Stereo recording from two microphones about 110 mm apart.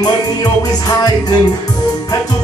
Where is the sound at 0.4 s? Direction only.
35° left (ahead or behind).